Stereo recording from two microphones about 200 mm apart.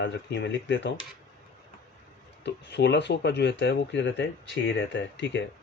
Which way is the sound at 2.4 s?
60° left (ahead or behind).